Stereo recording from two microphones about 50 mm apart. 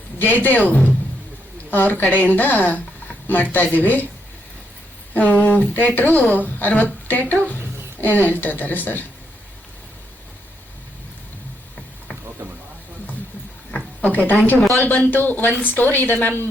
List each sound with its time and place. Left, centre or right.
0.2 s speech: left
5.1 s speech: left
13.7 s a sound: left
14.8 s speech: left